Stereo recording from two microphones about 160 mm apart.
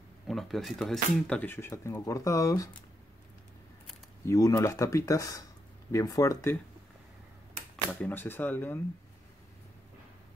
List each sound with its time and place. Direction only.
0.3 s speech: centre (ahead or behind); by 2.7 s 20° left (ahead or behind)
4.3 s speech: 20° left (ahead or behind)
7.9 s speech: 15° left (ahead or behind)